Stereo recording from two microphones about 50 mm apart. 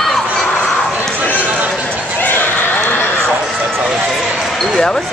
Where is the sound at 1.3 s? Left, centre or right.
Right.